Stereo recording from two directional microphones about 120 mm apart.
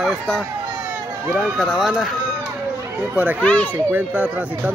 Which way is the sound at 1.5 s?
Centre (ahead or behind).